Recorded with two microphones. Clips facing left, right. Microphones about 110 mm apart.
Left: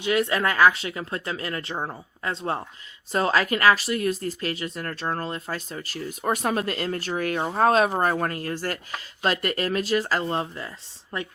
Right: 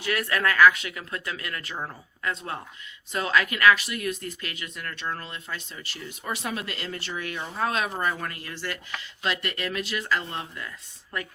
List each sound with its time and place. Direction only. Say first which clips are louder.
0.0 s a woman's voice: left 4 dB; 25° left (ahead or behind)